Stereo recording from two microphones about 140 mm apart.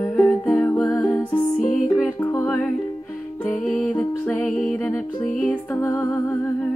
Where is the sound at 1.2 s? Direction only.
10° left (ahead or behind).